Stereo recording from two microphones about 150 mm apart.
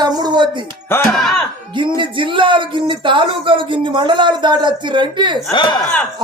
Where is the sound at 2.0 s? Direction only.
35° right (ahead or behind).